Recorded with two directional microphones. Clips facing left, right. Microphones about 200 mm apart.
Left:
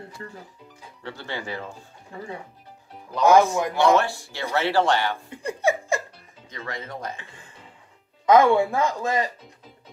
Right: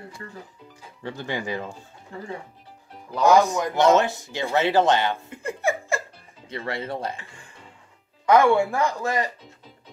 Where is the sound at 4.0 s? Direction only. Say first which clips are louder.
Right 3 dB; 20° right (ahead or behind).